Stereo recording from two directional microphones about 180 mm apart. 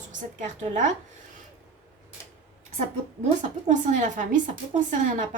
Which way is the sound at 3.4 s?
45° right (ahead or behind).